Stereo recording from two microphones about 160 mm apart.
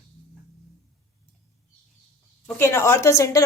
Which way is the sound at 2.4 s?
15° left (ahead or behind).